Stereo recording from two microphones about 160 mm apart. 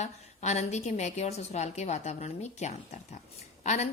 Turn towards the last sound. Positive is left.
turn(degrees=45)  # may be behind; listen again after turning